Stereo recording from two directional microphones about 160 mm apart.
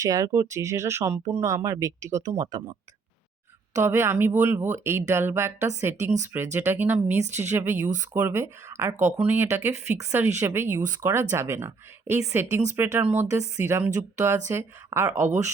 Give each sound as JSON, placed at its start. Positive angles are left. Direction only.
{"t": 0.0, "sound": "speech", "side_deg": -20}
{"t": 3.8, "sound": "speech", "side_deg": -15}